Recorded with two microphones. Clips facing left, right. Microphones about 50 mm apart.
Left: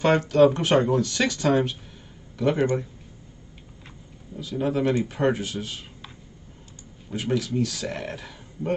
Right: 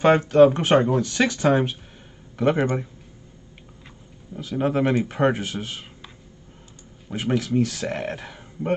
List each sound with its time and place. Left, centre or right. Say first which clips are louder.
0.0 s speech: right 3 dB; right
4.4 s speech: right 2 dB; right
7.1 s speech: right 2 dB; right